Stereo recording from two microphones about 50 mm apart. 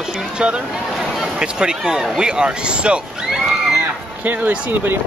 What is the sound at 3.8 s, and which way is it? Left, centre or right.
Speech, right.